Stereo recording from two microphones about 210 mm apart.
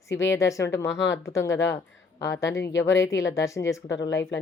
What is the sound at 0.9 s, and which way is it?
Speech, 60° left (ahead or behind).